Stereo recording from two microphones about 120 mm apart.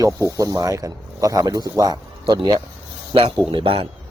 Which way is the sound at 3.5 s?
50° right (ahead or behind).